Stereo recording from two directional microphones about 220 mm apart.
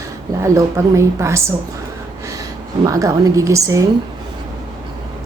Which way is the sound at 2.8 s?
15° right (ahead or behind).